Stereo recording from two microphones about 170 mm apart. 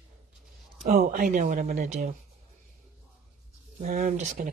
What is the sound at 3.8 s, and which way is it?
Speech, 50° right (ahead or behind).